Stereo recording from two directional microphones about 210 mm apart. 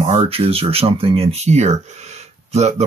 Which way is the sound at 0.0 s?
25° right (ahead or behind).